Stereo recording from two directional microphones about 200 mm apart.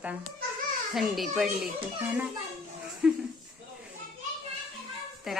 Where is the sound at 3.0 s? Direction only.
5° right (ahead or behind).